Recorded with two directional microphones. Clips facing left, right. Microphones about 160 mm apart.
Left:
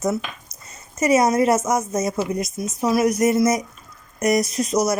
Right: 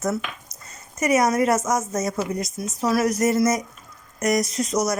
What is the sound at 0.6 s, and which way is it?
A woman's voice, 25° left (ahead or behind).